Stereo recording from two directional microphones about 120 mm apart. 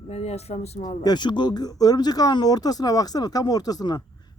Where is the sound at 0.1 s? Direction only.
65° left (ahead or behind).